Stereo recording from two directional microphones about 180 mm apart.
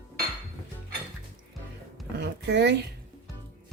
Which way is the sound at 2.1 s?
70° right (ahead or behind).